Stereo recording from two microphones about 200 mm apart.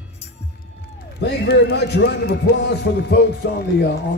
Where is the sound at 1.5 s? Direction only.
55° left (ahead or behind).